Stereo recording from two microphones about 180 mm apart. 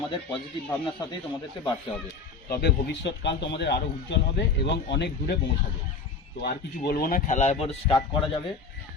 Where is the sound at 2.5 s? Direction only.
65° left (ahead or behind).